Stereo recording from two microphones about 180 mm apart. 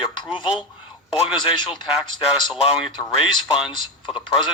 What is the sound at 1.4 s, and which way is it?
Speech, 25° left (ahead or behind).